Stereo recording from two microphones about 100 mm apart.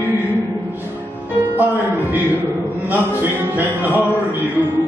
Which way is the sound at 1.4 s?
20° right (ahead or behind).